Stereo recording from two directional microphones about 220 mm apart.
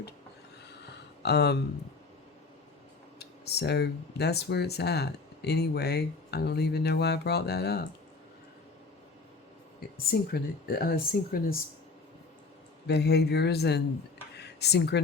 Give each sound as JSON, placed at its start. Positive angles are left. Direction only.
{"t": 1.2, "sound": "speech", "side_deg": 50}
{"t": 3.2, "sound": "speech", "side_deg": 45}
{"t": 10.1, "sound": "speech", "side_deg": 40}
{"t": 12.9, "sound": "speech", "side_deg": 50}
{"t": 14.3, "sound": "a sound", "side_deg": 50}